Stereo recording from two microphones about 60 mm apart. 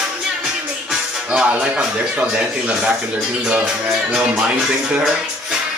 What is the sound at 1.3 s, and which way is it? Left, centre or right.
Speech, centre.